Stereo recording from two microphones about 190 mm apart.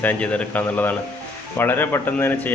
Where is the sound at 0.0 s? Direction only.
10° left (ahead or behind).